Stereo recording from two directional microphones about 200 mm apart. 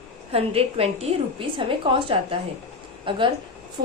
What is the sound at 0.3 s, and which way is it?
A woman's voice, 30° right (ahead or behind).